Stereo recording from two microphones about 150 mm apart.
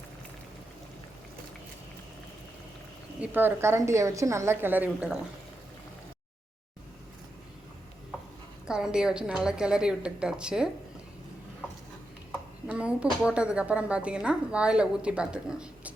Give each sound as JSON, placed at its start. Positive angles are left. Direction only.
{"t": 3.2, "sound": "a woman's voice", "side_deg": -15}
{"t": 8.6, "sound": "a woman's voice", "side_deg": -5}
{"t": 12.6, "sound": "a woman's voice", "side_deg": -5}